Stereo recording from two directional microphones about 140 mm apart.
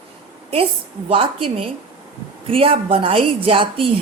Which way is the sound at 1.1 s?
40° right (ahead or behind).